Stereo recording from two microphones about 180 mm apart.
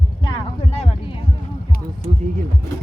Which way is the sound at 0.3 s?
35° left (ahead or behind).